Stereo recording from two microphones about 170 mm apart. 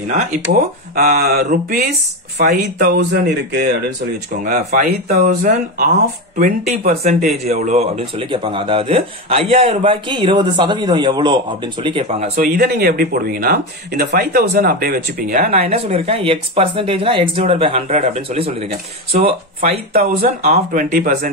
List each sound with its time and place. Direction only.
0.1 s speech: 50° right (ahead or behind)
4.7 s speech: 45° right (ahead or behind)
7.1 s speech: 40° right (ahead or behind)
12.1 s speech: 45° right (ahead or behind)
12.5 s speech: 65° right (ahead or behind)
15.7 s speech: 35° right (ahead or behind)
19.9 s speech: 60° right (ahead or behind)
20.2 s speech: 50° right (ahead or behind)